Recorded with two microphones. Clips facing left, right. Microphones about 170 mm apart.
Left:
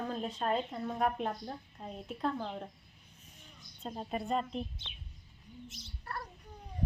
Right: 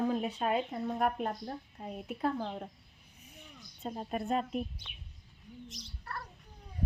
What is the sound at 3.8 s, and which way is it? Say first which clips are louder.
Speech: right 2 dB; centre (ahead or behind).